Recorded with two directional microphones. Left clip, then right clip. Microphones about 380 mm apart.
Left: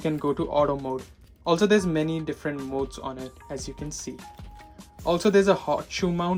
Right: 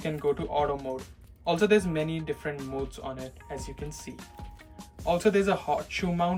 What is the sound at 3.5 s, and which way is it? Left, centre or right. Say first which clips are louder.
Speech: left 4 dB; centre.